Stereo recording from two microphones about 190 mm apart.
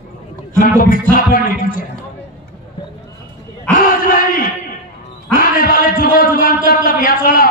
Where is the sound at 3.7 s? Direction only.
45° left (ahead or behind).